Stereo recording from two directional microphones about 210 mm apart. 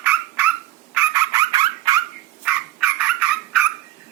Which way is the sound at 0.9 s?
15° right (ahead or behind).